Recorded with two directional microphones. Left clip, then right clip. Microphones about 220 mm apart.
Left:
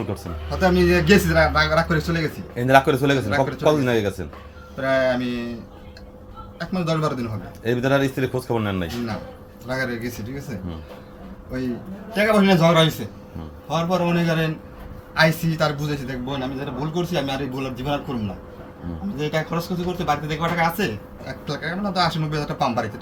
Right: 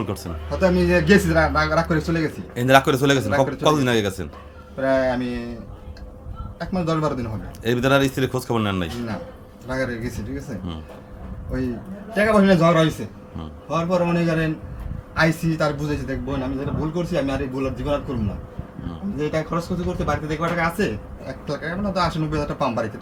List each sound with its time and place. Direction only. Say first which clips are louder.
0.5 s a man's voice: even; centre (ahead or behind)
2.6 s a man's voice: even; 20° right (ahead or behind)
4.8 s a man's voice: even; centre (ahead or behind)
6.6 s a man's voice: right 1 dB; centre (ahead or behind)
7.6 s a man's voice: right 2 dB; 20° right (ahead or behind)
9.6 s a man's voice: even; centre (ahead or behind)
12.1 s a man's voice: right 1 dB; centre (ahead or behind)
19.1 s a man's voice: right 1 dB; centre (ahead or behind)